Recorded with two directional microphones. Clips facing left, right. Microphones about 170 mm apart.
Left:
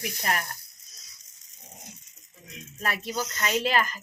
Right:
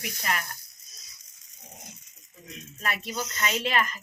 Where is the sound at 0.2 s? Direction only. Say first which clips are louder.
Left 1 dB; 40° left (ahead or behind).